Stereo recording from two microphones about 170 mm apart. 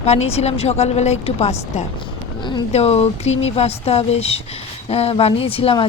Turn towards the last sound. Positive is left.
turn(degrees=30)  # may be behind; listen again after turning